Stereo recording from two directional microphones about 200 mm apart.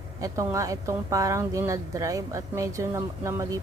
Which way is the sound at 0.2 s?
15° right (ahead or behind).